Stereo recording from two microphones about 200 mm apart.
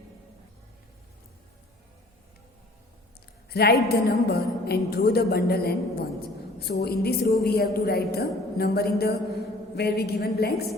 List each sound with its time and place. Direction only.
3.5 s a woman's voice: 50° left (ahead or behind)